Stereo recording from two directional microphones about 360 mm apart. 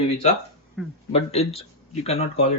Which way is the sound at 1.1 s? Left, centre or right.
Centre.